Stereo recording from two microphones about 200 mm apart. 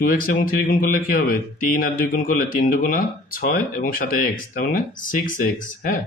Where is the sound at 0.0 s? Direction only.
45° left (ahead or behind).